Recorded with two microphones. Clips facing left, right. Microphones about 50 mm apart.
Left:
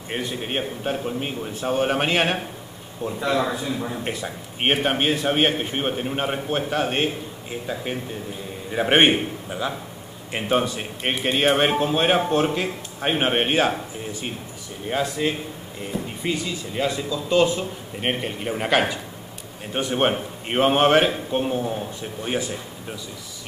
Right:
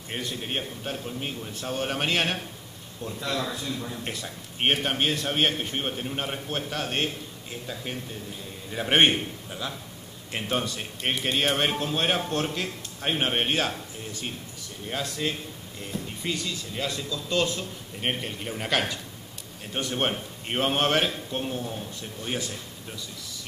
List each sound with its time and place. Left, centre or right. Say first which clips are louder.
0.1 s a man's voice: left 5 dB; centre